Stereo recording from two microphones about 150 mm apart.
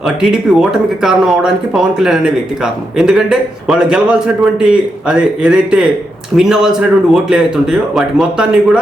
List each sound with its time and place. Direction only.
0.0 s a man's voice: 5° right (ahead or behind)